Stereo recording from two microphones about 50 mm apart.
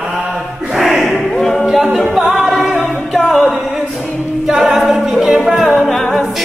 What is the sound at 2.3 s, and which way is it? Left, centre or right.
Singing, centre.